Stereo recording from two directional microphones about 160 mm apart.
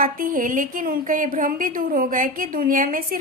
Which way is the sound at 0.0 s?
60° right (ahead or behind).